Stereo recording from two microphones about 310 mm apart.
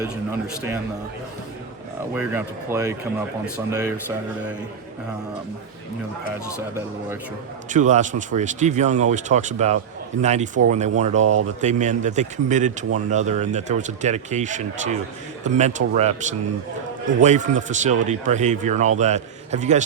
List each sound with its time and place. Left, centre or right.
2.1 s speech: centre
7.7 s speech: right